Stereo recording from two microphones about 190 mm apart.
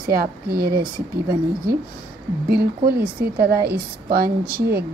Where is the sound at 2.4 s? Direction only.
55° right (ahead or behind).